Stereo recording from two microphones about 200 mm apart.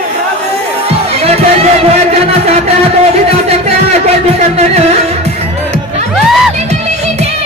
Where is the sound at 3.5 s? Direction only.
30° right (ahead or behind).